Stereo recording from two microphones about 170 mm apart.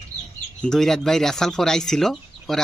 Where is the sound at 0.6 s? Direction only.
Centre (ahead or behind).